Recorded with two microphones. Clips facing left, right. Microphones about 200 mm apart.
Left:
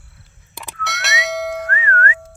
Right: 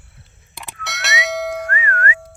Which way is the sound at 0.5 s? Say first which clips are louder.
Left 3 dB; centre (ahead or behind).